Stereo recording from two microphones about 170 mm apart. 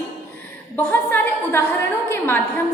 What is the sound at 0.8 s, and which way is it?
A woman's voice, 10° left (ahead or behind).